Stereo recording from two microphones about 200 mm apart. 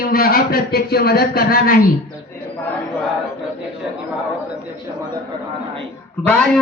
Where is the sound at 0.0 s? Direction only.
50° left (ahead or behind).